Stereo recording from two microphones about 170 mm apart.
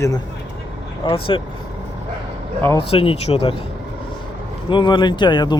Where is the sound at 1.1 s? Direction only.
30° left (ahead or behind).